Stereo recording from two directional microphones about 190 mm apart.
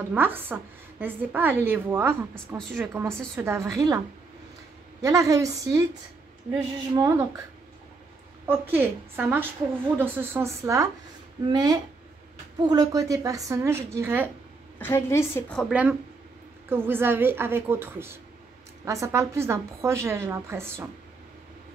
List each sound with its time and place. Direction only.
0.1 s a woman's voice: 10° right (ahead or behind)
2.3 s a woman's voice: centre (ahead or behind)
2.9 s a woman's voice: 15° right (ahead or behind)
5.0 s a woman's voice: 15° right (ahead or behind)
7.0 s a woman's voice: 15° right (ahead or behind)
8.5 s a woman's voice: 10° right (ahead or behind)
14.8 s a woman's voice: 10° left (ahead or behind)
15.7 s a woman's voice: 5° right (ahead or behind)